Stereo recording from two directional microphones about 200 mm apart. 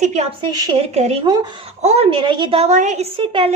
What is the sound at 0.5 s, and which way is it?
A woman's voice, 20° right (ahead or behind).